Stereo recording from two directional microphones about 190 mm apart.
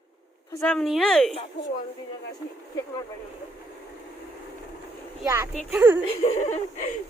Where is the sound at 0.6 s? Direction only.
Centre (ahead or behind).